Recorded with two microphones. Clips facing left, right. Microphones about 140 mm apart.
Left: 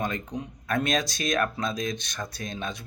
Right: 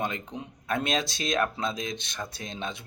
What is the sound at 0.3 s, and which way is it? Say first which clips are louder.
Speech: left 3 dB; 25° right (ahead or behind).